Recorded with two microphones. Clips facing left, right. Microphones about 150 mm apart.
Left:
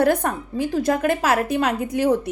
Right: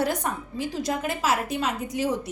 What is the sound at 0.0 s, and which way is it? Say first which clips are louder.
A woman's voice: left 7 dB; 55° left (ahead or behind).